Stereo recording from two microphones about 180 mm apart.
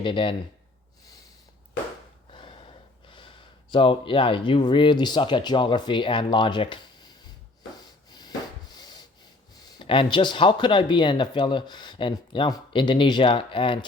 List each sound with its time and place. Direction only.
0.0 s speech: 30° left (ahead or behind)
2.3 s speech: 30° left (ahead or behind)
8.7 s rub: 25° left (ahead or behind)
9.7 s speech: 30° left (ahead or behind)